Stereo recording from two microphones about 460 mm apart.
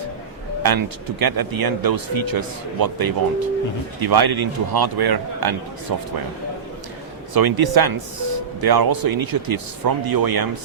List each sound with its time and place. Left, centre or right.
0.6 s speech: right
7.3 s speech: right